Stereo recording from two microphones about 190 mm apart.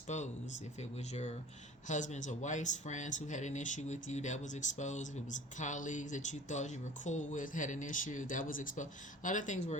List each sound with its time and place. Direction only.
0.1 s speech: 40° left (ahead or behind)